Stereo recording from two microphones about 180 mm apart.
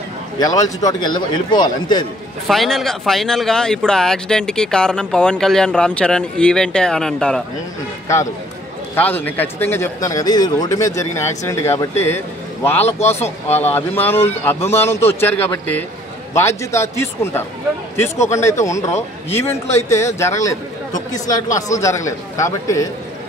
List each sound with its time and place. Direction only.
0.4 s a man's voice: 20° left (ahead or behind)
2.4 s speech: centre (ahead or behind)
8.9 s speech: 10° left (ahead or behind)
12.8 s speech: 35° left (ahead or behind)
13.7 s speech: 10° left (ahead or behind)